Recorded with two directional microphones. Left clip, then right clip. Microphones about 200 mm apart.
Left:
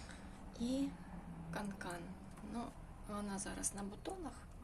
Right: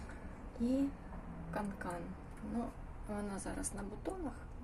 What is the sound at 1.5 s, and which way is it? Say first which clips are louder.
Speech: right 4 dB; centre (ahead or behind).